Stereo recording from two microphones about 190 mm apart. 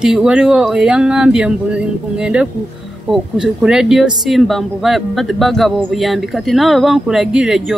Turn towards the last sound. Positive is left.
turn(degrees=0)  # may be behind; listen again after turning